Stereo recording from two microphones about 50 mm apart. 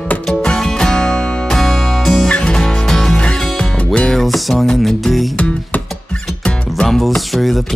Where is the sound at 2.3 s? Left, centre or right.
Centre.